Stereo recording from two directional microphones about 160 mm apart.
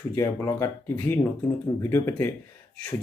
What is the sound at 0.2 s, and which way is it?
Speech, 20° left (ahead or behind).